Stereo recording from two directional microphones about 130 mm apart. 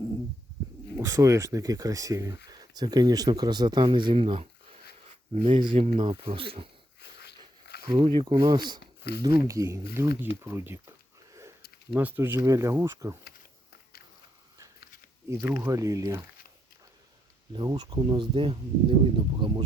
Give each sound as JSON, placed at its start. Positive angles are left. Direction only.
{"t": 0.6, "sound": "a sound", "side_deg": -35}
{"t": 0.9, "sound": "speech", "side_deg": -25}
{"t": 4.1, "sound": "a sound", "side_deg": -50}
{"t": 5.4, "sound": "speech", "side_deg": -40}
{"t": 5.7, "sound": "speech", "side_deg": -65}
{"t": 6.0, "sound": "speech", "side_deg": -40}
{"t": 7.9, "sound": "speech", "side_deg": -40}
{"t": 11.9, "sound": "speech", "side_deg": -15}
{"t": 15.3, "sound": "speech", "side_deg": -20}
{"t": 17.5, "sound": "speech", "side_deg": -35}